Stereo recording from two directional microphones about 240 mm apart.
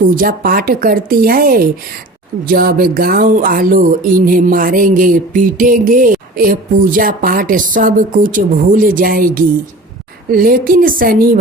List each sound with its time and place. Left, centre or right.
0.0 s speech: right